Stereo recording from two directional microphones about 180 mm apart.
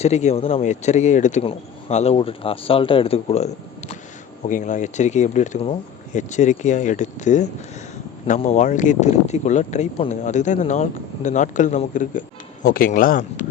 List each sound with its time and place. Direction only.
0.0 s speech: 40° left (ahead or behind)
8.6 s speech: 45° left (ahead or behind)